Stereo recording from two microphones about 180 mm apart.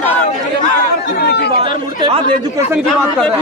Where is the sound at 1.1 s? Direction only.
65° left (ahead or behind).